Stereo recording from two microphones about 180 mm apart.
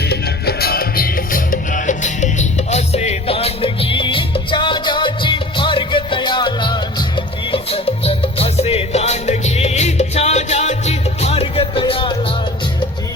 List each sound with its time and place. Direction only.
0.0 s music: 65° left (ahead or behind); by 12.1 s 30° left (ahead or behind)